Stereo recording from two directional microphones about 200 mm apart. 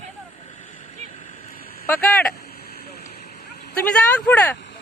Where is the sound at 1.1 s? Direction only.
40° left (ahead or behind).